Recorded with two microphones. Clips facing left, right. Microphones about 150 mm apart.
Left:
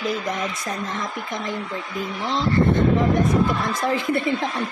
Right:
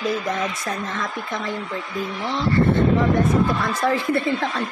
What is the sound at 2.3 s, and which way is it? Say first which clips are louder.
A woman's voice: even; 15° left (ahead or behind).